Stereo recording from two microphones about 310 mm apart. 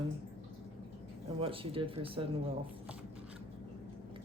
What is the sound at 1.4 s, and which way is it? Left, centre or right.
Speech, centre.